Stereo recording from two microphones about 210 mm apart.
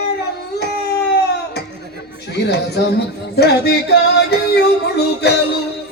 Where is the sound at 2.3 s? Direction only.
50° left (ahead or behind).